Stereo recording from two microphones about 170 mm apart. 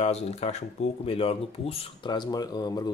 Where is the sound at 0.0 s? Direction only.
35° left (ahead or behind).